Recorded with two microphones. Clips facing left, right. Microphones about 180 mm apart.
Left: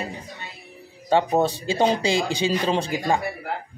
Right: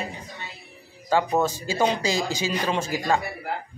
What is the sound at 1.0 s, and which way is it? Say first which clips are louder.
Speech: left 2 dB; 30° left (ahead or behind).